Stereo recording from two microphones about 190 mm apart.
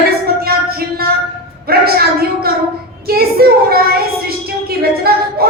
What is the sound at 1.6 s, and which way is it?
A woman's voice, 55° right (ahead or behind).